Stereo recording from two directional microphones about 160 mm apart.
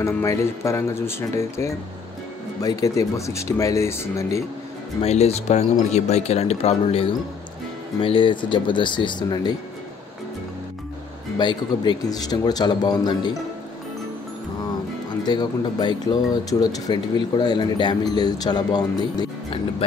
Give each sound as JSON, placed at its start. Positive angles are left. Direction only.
{"t": 0.0, "sound": "speech", "side_deg": 15}
{"t": 5.0, "sound": "speech", "side_deg": 40}
{"t": 11.3, "sound": "speech", "side_deg": 25}
{"t": 15.2, "sound": "speech", "side_deg": 25}